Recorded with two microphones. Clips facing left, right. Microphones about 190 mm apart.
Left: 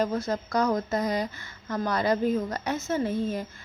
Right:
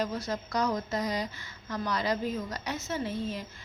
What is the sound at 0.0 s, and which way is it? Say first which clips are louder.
A woman's voice: left 5 dB; 50° left (ahead or behind).